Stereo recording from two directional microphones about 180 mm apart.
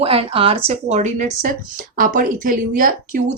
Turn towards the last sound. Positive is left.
turn(degrees=-50)  # may be behind; listen again after turning